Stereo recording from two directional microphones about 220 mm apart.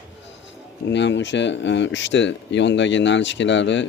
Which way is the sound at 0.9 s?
55° left (ahead or behind).